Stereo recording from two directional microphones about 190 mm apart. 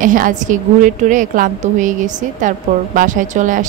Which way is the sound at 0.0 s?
45° right (ahead or behind).